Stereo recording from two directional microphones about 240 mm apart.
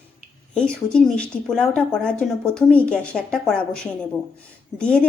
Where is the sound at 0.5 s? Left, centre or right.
Centre.